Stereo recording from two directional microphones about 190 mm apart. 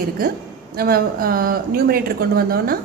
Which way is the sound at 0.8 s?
55° right (ahead or behind).